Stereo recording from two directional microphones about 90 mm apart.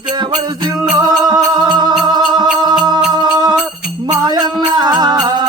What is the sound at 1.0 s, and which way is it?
Music, 45° right (ahead or behind).